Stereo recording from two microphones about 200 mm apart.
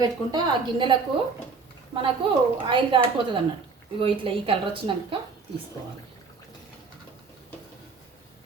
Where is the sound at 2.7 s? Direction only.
25° right (ahead or behind).